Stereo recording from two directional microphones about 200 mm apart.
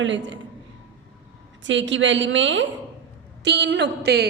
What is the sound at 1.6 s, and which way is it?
A woman's voice, 65° right (ahead or behind).